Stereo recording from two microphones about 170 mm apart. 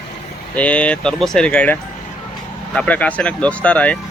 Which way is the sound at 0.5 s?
10° left (ahead or behind).